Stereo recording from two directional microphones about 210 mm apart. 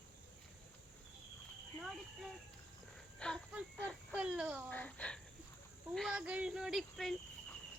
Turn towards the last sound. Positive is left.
turn(degrees=0)  # may be behind; listen again after turning